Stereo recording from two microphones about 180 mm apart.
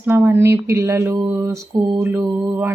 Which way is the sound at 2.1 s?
10° right (ahead or behind).